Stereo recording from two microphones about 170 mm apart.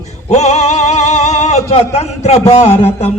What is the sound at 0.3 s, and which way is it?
Music, 40° left (ahead or behind).